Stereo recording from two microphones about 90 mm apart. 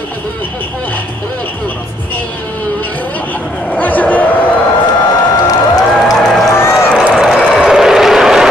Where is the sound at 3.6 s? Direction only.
20° left (ahead or behind).